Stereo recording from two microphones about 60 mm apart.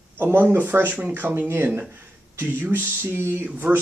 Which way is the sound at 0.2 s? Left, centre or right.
Right.